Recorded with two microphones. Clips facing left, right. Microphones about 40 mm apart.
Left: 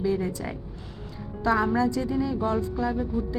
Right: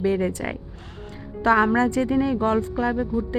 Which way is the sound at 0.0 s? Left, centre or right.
Right.